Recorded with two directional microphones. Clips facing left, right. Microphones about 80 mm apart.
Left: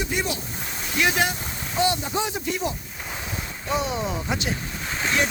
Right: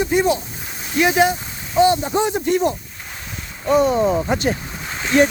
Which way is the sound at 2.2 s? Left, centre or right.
Right.